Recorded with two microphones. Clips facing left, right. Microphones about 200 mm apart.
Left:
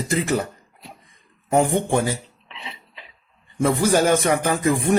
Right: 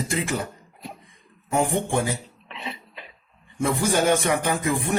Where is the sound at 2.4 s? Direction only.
50° right (ahead or behind).